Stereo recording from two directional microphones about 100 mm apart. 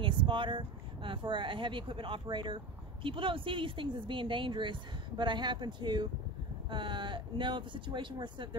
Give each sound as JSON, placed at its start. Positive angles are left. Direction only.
{"t": 0.0, "sound": "speech", "side_deg": -55}